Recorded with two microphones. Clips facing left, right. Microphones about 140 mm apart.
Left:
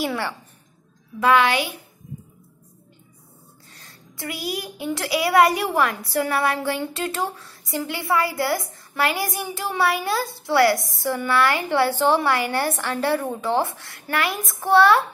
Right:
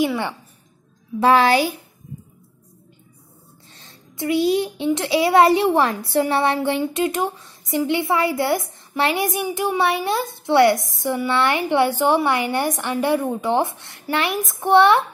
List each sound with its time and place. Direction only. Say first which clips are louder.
1.2 s a child's voice: right 3 dB; 35° right (ahead or behind)
3.7 s a woman's voice: right 3 dB; 25° right (ahead or behind)